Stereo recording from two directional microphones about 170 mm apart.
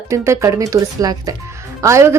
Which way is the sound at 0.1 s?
15° right (ahead or behind).